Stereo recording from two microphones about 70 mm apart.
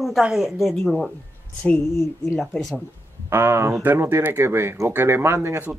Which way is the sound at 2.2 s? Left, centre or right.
Centre.